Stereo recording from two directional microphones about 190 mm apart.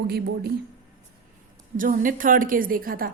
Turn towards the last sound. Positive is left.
turn(degrees=-50)  # may be behind; listen again after turning